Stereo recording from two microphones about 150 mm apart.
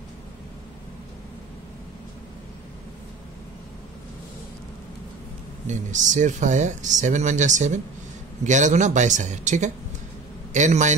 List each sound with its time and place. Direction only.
5.7 s a man's voice: 55° right (ahead or behind)